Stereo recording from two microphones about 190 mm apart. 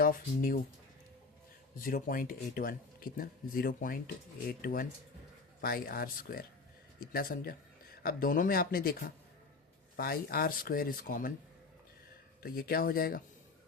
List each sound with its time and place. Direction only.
0.0 s speech: 45° left (ahead or behind)
1.8 s speech: 45° left (ahead or behind)
12.4 s speech: 50° left (ahead or behind)